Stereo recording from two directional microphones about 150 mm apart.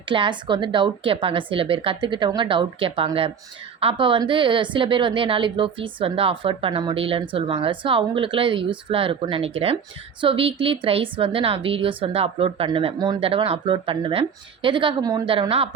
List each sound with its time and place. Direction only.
0.1 s a woman's voice: 35° right (ahead or behind)